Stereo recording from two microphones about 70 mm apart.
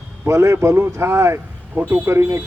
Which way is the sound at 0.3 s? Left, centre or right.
Right.